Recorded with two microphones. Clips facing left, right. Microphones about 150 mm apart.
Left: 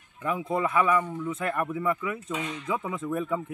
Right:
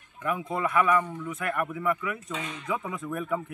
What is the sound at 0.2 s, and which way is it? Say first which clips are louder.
Speech: left 2 dB; 30° left (ahead or behind).